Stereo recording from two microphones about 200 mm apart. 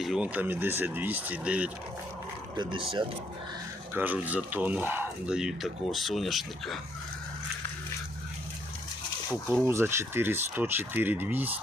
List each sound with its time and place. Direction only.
0.0 s speech: 5° right (ahead or behind)
2.6 s speech: 25° right (ahead or behind)
3.9 s speech: 10° right (ahead or behind)
9.6 s speech: 10° right (ahead or behind)